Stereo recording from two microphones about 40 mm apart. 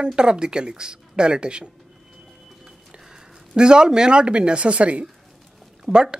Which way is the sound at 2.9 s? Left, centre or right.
Centre.